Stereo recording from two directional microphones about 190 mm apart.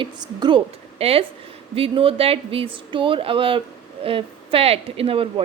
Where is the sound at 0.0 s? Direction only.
20° right (ahead or behind).